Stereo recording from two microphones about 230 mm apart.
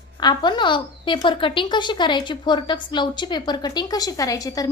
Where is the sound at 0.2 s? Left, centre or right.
Centre.